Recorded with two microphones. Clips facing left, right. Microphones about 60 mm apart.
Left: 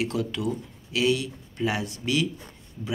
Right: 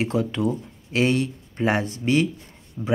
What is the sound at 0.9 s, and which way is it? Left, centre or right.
Speech, right.